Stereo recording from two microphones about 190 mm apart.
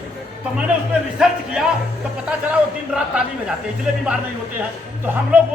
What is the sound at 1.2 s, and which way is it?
A man's voice, 5° right (ahead or behind).